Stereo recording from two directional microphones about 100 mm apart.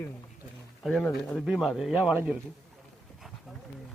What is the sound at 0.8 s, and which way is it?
Speech, centre (ahead or behind).